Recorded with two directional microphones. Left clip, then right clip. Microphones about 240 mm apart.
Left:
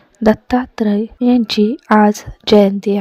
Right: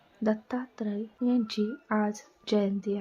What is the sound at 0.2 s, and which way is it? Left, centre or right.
A woman's voice, left.